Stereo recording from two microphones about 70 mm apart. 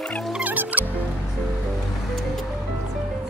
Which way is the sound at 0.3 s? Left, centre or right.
Right.